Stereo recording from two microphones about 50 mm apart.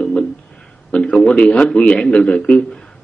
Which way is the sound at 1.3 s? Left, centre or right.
Left.